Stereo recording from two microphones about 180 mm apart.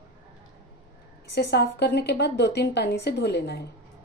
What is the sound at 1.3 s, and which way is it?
A woman's voice, 65° left (ahead or behind).